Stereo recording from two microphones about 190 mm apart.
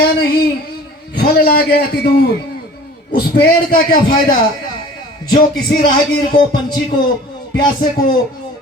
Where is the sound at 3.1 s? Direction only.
55° left (ahead or behind).